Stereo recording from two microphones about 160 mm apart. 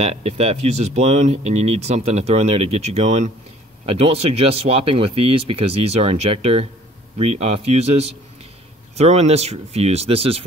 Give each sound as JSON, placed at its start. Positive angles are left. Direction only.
{"t": 0.0, "sound": "speech", "side_deg": -40}